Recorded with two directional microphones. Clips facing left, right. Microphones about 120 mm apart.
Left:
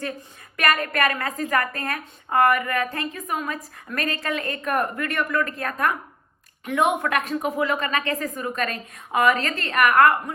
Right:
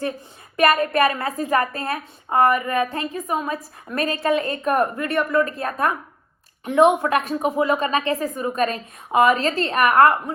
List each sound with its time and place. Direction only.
0.5 s a woman's voice: 25° right (ahead or behind)